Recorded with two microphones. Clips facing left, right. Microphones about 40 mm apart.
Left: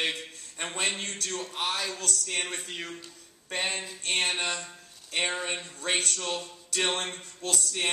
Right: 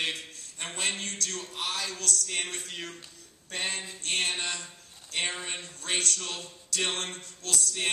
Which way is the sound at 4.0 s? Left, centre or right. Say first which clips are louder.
Left 2 dB; left.